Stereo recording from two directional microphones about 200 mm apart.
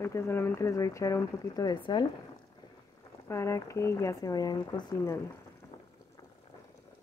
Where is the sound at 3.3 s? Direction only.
15° left (ahead or behind).